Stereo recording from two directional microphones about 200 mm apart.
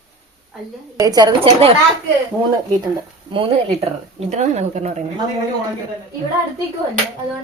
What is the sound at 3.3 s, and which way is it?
A woman's voice, 30° right (ahead or behind).